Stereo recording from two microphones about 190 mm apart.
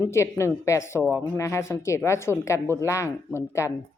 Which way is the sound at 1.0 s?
5° right (ahead or behind).